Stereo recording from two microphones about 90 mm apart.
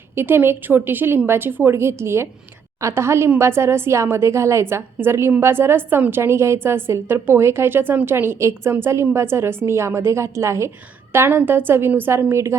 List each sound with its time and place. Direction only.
0.2 s a woman's voice: 25° right (ahead or behind)